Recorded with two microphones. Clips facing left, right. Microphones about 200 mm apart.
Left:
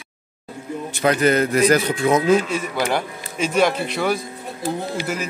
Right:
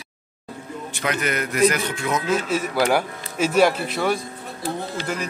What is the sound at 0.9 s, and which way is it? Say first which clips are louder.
Speech: left 8 dB; 35° left (ahead or behind).